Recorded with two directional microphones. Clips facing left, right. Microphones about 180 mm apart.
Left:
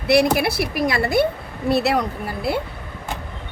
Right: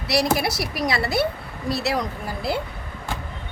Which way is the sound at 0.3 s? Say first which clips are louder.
Left 4 dB; 55° left (ahead or behind).